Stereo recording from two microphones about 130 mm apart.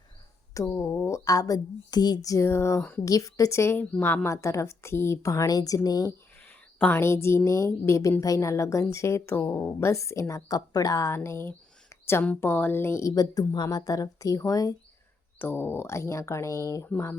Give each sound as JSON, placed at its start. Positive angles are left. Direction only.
{"t": 0.5, "sound": "a woman's voice", "side_deg": 20}
{"t": 6.7, "sound": "a woman's voice", "side_deg": 15}
{"t": 15.4, "sound": "a woman's voice", "side_deg": 15}